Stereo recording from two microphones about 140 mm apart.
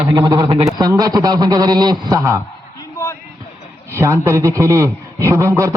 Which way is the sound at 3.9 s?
20° right (ahead or behind).